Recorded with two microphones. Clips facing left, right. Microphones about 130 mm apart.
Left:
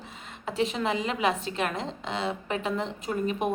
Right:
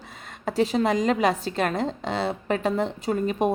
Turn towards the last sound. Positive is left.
turn(degrees=-35)  # may be behind; listen again after turning